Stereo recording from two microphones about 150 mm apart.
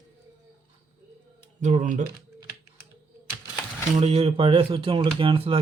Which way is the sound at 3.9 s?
40° right (ahead or behind).